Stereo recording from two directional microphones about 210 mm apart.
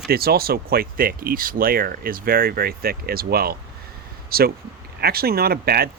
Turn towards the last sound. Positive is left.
turn(degrees=-45)  # may be behind; listen again after turning